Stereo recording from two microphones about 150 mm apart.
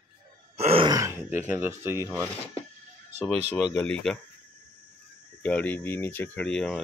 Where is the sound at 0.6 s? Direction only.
40° right (ahead or behind).